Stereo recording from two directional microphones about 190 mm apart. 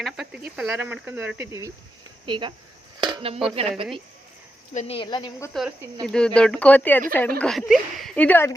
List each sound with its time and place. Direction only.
0.0 s cricket: centre (ahead or behind)
0.5 s speech: 5° right (ahead or behind); by 2.5 s 25° right (ahead or behind)
3.0 s a sound: 25° right (ahead or behind)
3.5 s a woman's voice: 30° right (ahead or behind)
4.7 s speech: 35° left (ahead or behind)
6.1 s speech: 5° left (ahead or behind)